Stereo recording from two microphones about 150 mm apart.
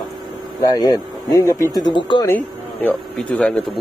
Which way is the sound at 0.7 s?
25° left (ahead or behind).